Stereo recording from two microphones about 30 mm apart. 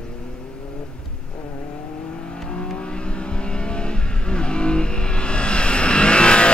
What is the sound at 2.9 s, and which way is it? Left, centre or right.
Vehicle, left.